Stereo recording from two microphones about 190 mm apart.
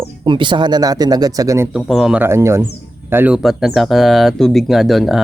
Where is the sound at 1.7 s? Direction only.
Centre (ahead or behind).